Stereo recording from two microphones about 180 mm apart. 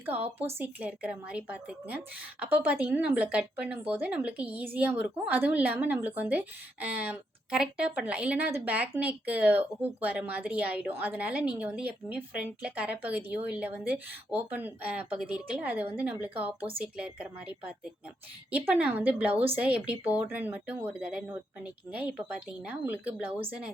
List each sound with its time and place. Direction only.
0.0 s a woman's voice: 10° right (ahead or behind)